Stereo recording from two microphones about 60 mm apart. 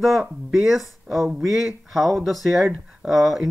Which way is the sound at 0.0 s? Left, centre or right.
Centre.